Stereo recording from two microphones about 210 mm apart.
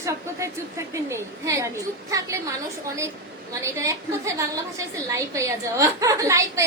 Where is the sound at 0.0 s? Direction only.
15° right (ahead or behind).